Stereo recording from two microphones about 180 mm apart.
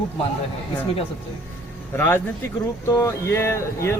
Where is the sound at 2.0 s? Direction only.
15° left (ahead or behind).